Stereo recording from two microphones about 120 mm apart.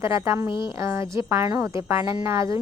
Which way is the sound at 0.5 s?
40° left (ahead or behind).